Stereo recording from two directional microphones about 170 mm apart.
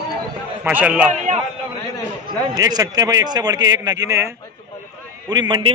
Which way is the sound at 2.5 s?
20° right (ahead or behind).